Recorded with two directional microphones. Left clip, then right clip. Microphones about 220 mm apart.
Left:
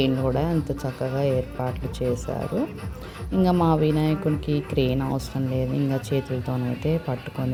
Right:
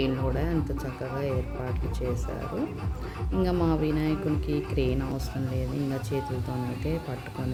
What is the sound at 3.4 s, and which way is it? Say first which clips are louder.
A woman's voice: left 6 dB; 20° left (ahead or behind).